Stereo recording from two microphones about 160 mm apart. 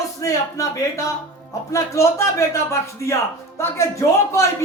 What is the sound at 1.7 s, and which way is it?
A man's voice, 20° left (ahead or behind).